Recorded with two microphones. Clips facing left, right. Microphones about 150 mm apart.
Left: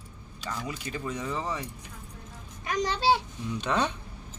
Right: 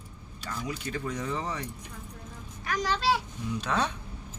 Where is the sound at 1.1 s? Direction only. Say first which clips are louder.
Left 1 dB; 5° left (ahead or behind).